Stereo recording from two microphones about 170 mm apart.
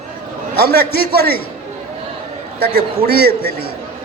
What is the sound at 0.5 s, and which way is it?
Speech, 70° right (ahead or behind).